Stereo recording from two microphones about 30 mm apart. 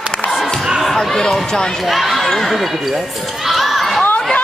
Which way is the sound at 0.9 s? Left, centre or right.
Centre.